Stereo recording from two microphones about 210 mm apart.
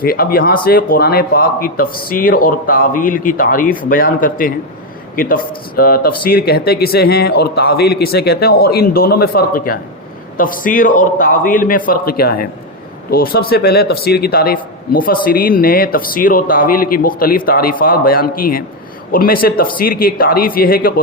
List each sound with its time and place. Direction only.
0.0 s a man's voice: 45° left (ahead or behind)